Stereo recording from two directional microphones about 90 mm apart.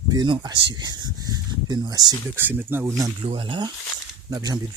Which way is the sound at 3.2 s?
75° right (ahead or behind).